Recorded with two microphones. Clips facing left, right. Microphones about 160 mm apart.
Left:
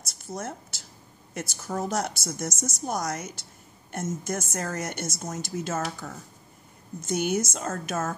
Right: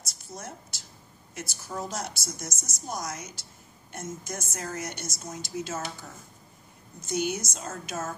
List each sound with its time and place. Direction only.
0.1 s a woman's voice: 50° left (ahead or behind)